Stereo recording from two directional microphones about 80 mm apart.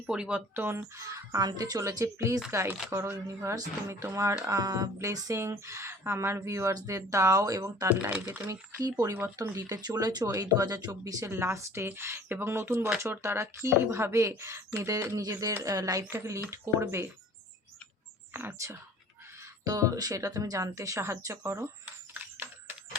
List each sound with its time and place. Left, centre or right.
0.1 s speech: centre
0.9 s speech: right
1.5 s speech: right
1.8 s speech: right
4.4 s speech: right
7.9 s speech: centre
8.8 s speech: right
9.1 s speech: right
9.6 s speech: right
11.3 s speech: right
18.3 s speech: right
19.6 s speech: right
22.1 s a sound: right